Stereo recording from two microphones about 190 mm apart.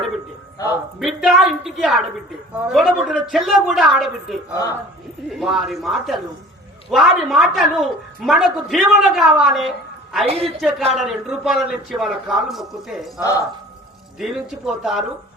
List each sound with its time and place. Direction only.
0.6 s speech: 20° left (ahead or behind)
0.9 s a woman's voice: centre (ahead or behind)
10.2 s a man's voice: 30° right (ahead or behind)
10.6 s a woman's voice: centre (ahead or behind)
14.2 s a woman's voice: centre (ahead or behind)